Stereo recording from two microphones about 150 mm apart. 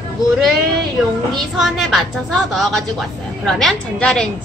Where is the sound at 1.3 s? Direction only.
Centre (ahead or behind).